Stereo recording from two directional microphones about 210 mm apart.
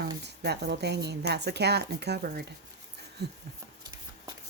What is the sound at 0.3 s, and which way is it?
Speech, 50° right (ahead or behind).